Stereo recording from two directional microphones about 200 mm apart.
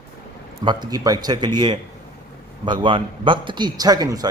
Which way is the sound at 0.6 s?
20° right (ahead or behind).